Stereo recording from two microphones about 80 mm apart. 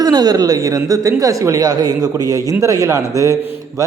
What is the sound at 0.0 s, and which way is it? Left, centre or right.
A woman's voice, right.